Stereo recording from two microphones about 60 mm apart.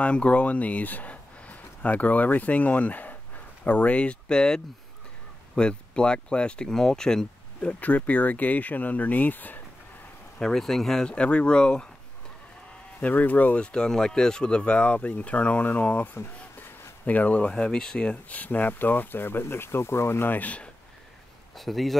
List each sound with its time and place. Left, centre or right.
0.0 s speech: left
5.6 s speech: centre
7.8 s speech: left
10.4 s speech: centre
11.1 s speech: centre
13.0 s speech: left
16.2 s a sound: left
17.0 s speech: left
20.3 s speech: left
21.5 s a man's voice: centre